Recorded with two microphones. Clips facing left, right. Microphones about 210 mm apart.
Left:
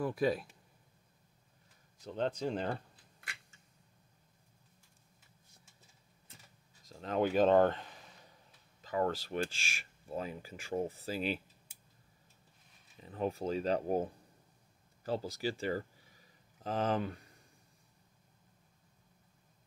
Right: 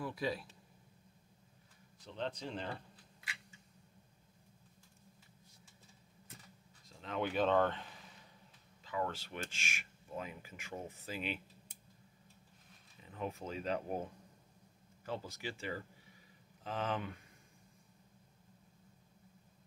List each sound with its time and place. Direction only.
0.0 s speech: 50° left (ahead or behind)
2.0 s speech: 45° left (ahead or behind)
6.9 s speech: 40° left (ahead or behind)
8.8 s speech: 40° left (ahead or behind)
13.0 s speech: 35° left (ahead or behind)